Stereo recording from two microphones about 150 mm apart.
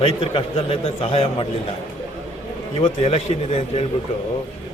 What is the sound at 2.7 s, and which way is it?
A man's voice, 40° left (ahead or behind).